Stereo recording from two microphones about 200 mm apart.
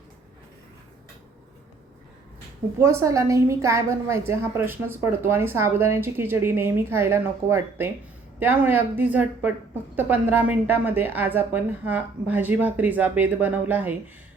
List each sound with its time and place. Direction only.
2.7 s speech: 15° right (ahead or behind)